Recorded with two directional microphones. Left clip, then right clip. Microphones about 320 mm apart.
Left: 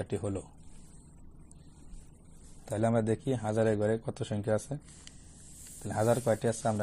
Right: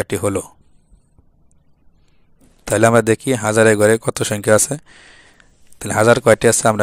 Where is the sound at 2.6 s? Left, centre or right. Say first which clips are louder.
Right 17 dB; right.